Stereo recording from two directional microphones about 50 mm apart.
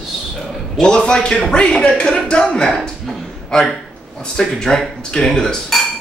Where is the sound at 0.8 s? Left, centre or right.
Centre.